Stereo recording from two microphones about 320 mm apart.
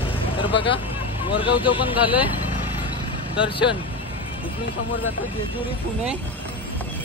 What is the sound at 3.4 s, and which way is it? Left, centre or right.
Speech, centre.